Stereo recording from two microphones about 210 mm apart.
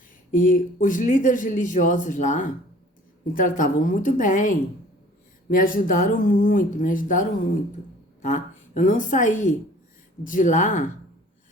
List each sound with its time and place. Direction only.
0.3 s a woman's voice: 40° left (ahead or behind)